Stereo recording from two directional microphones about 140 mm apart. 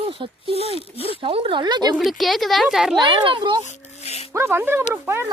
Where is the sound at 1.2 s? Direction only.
40° right (ahead or behind).